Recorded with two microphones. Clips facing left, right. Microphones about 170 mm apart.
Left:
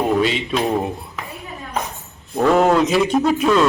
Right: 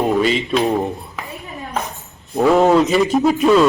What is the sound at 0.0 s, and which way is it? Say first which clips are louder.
Speech: right 2 dB; centre (ahead or behind).